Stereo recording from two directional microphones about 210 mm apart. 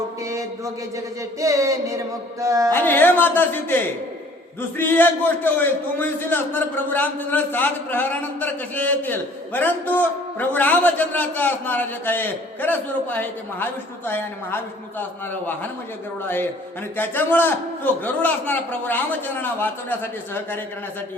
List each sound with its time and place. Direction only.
0.3 s music: 15° right (ahead or behind)
1.4 s a sound: 15° right (ahead or behind)
2.7 s a man's voice: 10° left (ahead or behind)
4.8 s a man's voice: 10° left (ahead or behind)